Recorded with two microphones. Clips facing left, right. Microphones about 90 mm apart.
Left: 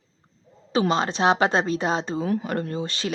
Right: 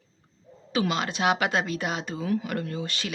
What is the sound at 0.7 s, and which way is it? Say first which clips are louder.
Speech: left 5 dB; 30° left (ahead or behind).